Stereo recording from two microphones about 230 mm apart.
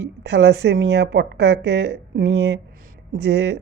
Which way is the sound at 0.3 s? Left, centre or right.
Right.